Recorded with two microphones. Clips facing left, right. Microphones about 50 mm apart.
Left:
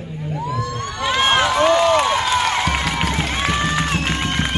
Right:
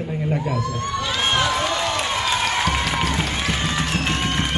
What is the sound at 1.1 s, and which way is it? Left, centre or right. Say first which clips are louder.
Run: left 6 dB; left.